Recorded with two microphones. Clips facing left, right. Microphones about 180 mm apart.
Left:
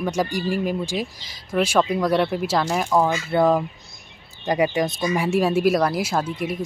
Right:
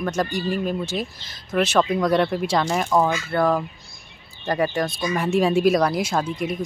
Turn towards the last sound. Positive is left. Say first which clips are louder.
# even
turn(degrees=5)  # may be behind; listen again after turning